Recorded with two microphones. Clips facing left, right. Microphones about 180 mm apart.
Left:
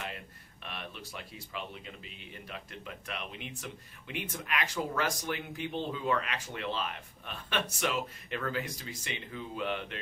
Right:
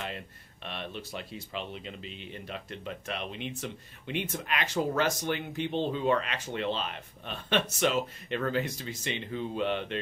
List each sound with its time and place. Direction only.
0.7 s speech: 25° right (ahead or behind)